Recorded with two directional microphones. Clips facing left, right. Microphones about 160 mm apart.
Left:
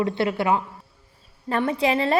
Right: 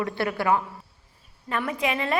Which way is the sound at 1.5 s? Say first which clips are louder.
Left 5 dB; 30° left (ahead or behind).